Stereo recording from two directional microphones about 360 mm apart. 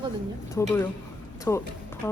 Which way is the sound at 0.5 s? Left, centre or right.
Centre.